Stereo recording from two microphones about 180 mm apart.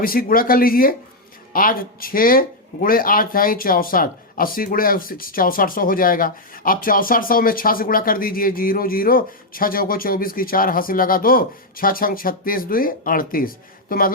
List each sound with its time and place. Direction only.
0.0 s speech: 55° left (ahead or behind)